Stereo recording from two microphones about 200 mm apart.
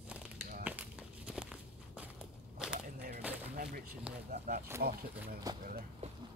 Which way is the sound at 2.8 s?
45° right (ahead or behind).